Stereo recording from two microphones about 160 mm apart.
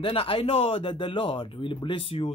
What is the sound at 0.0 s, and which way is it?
Speech, 35° left (ahead or behind).